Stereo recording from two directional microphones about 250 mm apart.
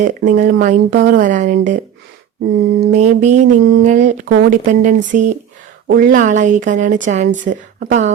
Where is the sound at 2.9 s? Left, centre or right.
Right.